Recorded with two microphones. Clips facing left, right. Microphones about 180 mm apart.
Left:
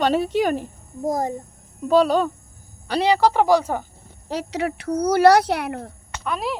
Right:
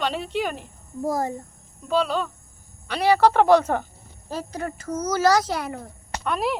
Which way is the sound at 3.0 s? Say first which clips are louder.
Even; 15° left (ahead or behind).